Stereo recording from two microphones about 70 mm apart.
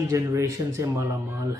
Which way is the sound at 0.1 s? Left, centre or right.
Right.